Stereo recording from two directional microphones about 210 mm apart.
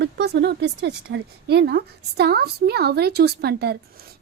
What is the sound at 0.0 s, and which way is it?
A woman's voice, 55° right (ahead or behind).